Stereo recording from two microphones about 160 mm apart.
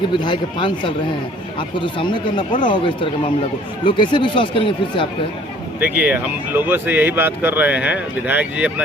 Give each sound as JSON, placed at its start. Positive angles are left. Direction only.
{"t": 0.2, "sound": "speech", "side_deg": 30}
{"t": 5.8, "sound": "speech", "side_deg": -10}